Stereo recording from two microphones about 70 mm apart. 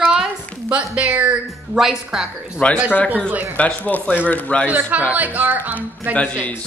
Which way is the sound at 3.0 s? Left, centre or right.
Right.